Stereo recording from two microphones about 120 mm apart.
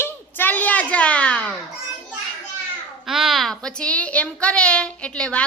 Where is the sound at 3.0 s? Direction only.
Centre (ahead or behind).